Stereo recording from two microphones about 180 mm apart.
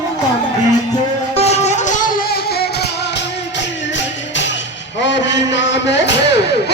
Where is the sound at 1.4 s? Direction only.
40° left (ahead or behind).